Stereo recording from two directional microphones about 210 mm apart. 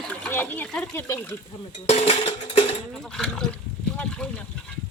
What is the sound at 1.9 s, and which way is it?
Music, 30° left (ahead or behind).